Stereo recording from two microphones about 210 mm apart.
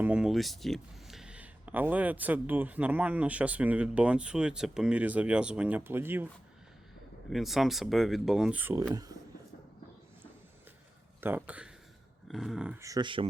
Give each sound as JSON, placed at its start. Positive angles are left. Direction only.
{"t": 0.0, "sound": "speech", "side_deg": -5}
{"t": 7.3, "sound": "speech", "side_deg": 0}
{"t": 11.2, "sound": "speech", "side_deg": -10}